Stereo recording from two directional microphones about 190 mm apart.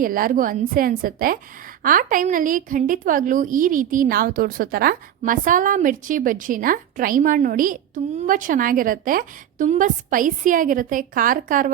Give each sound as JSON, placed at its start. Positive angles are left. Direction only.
{"t": 0.0, "sound": "a woman's voice", "side_deg": -45}